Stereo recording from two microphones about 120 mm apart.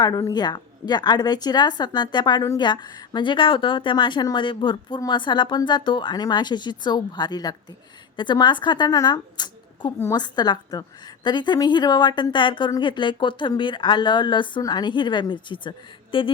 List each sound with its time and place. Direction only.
0.0 s speech: 30° left (ahead or behind)